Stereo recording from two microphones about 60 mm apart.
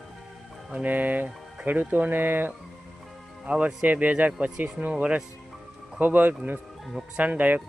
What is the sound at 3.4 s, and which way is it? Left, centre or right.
Speech, centre.